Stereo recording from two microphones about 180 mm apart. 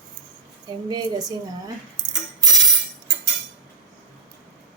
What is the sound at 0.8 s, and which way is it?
Speech, 20° right (ahead or behind).